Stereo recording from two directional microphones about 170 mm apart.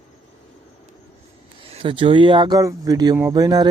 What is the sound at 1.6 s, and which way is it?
Speech, 30° right (ahead or behind).